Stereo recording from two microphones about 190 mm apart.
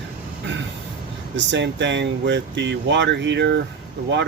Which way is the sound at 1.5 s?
70° right (ahead or behind).